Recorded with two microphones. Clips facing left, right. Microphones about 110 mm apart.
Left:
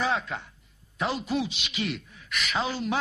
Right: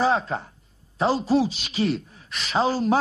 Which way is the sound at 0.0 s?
35° right (ahead or behind).